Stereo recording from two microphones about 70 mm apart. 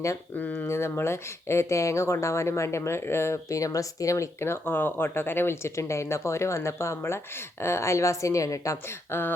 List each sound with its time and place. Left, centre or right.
0.3 s speech: left
0.7 s a woman's voice: left